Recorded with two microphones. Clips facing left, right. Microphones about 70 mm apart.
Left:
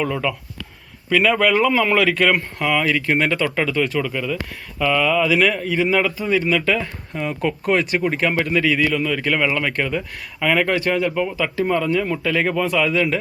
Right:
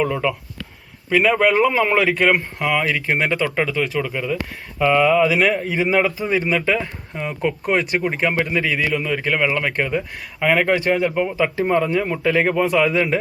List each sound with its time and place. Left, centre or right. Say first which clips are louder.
0.0 s speech: right 2 dB; centre
4.8 s speech: right 3 dB; right
5.3 s speech: even; centre
6.3 s speech: left 2 dB; right
6.7 s speech: even; centre
11.1 s speech: right 2 dB; centre